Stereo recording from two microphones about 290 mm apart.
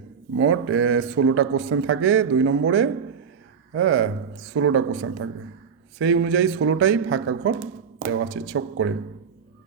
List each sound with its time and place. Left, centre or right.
0.3 s speech: right